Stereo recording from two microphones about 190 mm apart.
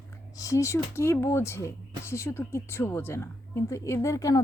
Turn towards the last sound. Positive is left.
turn(degrees=15)  # may be behind; listen again after turning